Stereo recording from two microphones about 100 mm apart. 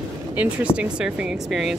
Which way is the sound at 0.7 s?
10° right (ahead or behind).